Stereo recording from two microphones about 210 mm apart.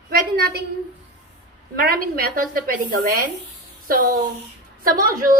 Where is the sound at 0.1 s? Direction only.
45° right (ahead or behind).